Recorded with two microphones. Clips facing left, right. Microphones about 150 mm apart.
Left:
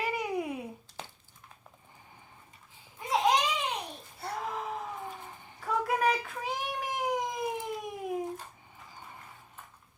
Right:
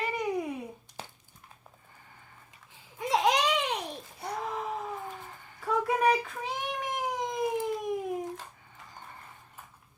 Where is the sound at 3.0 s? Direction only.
90° right.